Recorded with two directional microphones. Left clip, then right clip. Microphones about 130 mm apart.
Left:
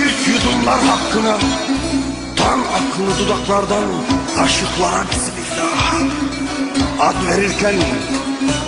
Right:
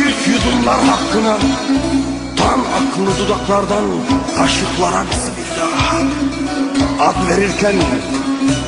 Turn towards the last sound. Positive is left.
turn(degrees=20)  # may be behind; listen again after turning